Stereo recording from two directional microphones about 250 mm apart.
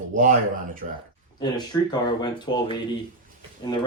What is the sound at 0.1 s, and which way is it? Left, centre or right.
Speech, right.